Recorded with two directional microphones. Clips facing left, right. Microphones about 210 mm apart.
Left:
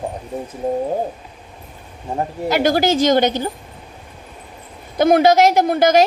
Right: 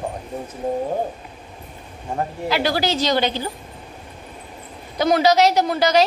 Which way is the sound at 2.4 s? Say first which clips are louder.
Left 6 dB; 45° left (ahead or behind).